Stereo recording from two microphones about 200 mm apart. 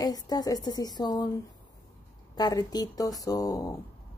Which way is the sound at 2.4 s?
20° left (ahead or behind).